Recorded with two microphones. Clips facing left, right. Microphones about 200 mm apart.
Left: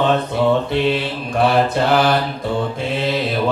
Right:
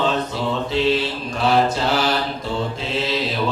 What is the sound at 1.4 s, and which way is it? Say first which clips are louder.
Mantra: left 3 dB; 55° left (ahead or behind).